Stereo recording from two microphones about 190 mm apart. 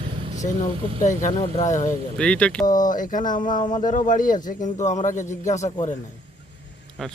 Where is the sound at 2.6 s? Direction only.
20° left (ahead or behind).